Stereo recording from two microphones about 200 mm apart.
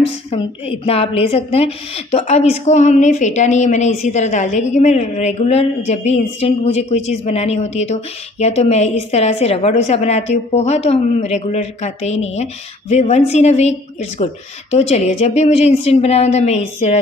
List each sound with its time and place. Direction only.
0.3 s a woman's voice: 30° left (ahead or behind)